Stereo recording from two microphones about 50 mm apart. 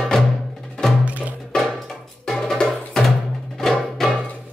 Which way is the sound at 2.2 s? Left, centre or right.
Centre.